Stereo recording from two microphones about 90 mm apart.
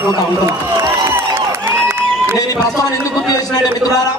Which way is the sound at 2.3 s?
40° left (ahead or behind).